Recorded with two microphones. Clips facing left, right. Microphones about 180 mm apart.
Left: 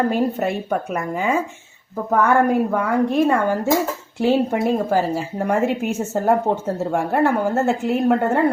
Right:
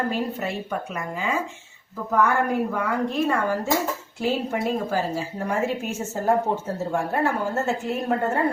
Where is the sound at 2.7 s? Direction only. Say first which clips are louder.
Left 6 dB; 50° left (ahead or behind).